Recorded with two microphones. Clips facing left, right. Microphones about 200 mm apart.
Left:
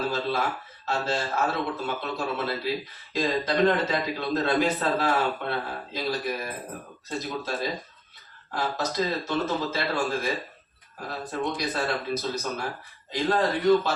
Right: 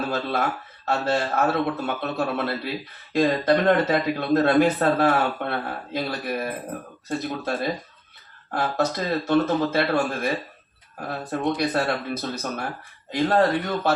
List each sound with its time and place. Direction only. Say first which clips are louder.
0.1 s speech: right 2 dB; 55° right (ahead or behind)